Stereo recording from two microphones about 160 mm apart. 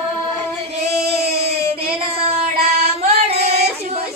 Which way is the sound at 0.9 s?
40° right (ahead or behind).